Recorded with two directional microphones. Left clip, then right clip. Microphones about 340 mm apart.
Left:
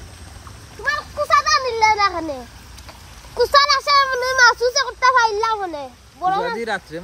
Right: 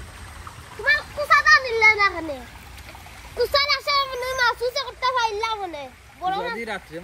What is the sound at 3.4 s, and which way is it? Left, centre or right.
A child's voice, left.